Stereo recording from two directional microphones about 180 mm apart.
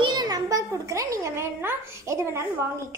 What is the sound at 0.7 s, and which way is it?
A woman's voice, 15° right (ahead or behind).